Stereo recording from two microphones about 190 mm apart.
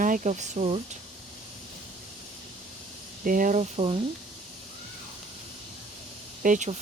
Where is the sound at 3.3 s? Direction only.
45° right (ahead or behind).